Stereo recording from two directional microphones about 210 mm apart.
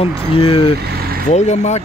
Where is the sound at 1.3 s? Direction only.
35° left (ahead or behind).